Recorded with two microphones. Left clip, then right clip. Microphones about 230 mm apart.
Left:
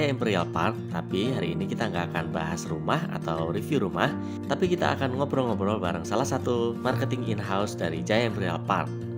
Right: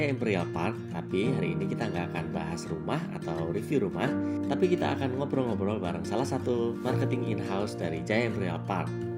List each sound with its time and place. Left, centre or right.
0.0 s speech: left